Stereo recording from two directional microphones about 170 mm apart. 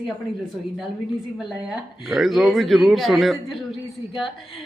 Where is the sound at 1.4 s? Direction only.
5° right (ahead or behind).